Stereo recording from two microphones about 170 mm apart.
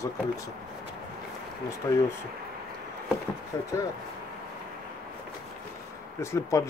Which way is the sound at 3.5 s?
20° left (ahead or behind).